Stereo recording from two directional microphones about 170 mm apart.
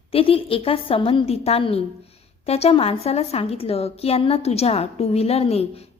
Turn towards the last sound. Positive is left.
turn(degrees=35)  # may be behind; listen again after turning